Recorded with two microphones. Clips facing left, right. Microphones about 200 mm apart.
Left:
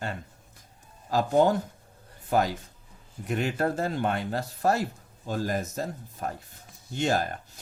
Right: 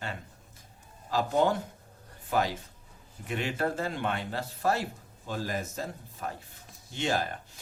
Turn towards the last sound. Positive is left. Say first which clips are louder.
# left 3 dB
turn(degrees=45)  # may be behind; listen again after turning